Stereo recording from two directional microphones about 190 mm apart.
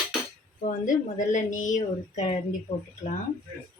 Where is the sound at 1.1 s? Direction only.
40° left (ahead or behind).